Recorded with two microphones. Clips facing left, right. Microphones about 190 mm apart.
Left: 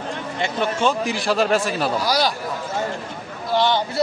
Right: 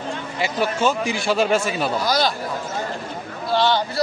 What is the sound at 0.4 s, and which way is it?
Speech, 5° right (ahead or behind).